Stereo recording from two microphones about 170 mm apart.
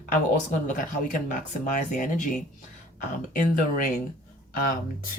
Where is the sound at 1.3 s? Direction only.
50° left (ahead or behind).